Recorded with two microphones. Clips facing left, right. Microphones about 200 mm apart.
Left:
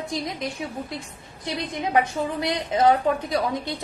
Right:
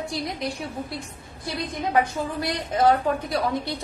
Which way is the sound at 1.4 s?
20° left (ahead or behind).